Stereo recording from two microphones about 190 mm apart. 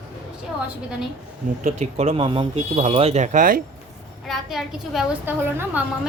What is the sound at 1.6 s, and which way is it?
Speech, 35° right (ahead or behind).